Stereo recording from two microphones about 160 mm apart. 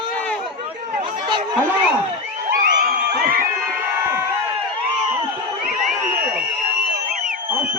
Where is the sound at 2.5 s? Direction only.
65° right (ahead or behind).